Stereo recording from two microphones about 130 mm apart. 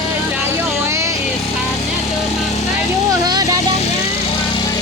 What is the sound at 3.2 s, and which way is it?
Vehicle, 30° right (ahead or behind).